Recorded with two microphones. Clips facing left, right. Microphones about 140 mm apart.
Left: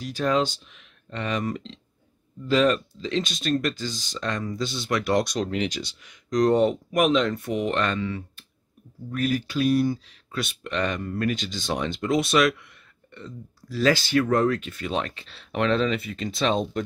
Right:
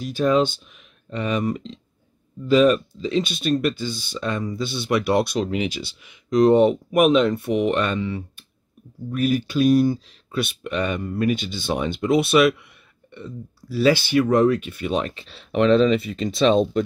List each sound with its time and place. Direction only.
0.0 s speech: 15° right (ahead or behind)